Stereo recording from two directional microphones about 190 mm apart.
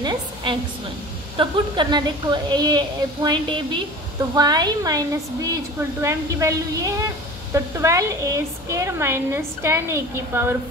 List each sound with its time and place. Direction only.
0.0 s a woman's voice: 25° right (ahead or behind)